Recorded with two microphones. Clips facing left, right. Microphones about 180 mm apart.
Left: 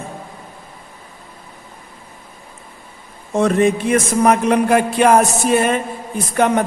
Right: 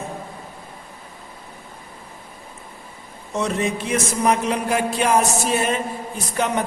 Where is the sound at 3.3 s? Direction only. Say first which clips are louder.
Left 8 dB; 55° left (ahead or behind).